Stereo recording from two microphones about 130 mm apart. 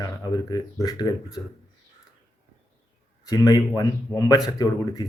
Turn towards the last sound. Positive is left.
turn(degrees=30)  # may be behind; listen again after turning